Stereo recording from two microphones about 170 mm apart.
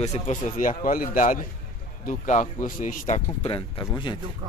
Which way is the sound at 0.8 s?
55° left (ahead or behind).